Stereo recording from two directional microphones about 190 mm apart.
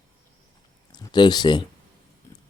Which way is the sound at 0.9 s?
20° left (ahead or behind).